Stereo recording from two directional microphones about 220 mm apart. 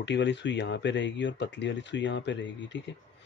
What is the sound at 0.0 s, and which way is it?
Speech, 55° left (ahead or behind).